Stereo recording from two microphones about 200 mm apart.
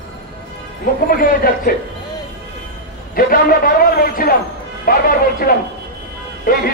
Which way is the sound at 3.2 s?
45° left (ahead or behind).